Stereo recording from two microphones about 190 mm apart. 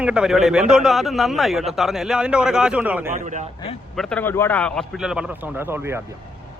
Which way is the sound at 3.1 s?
40° right (ahead or behind).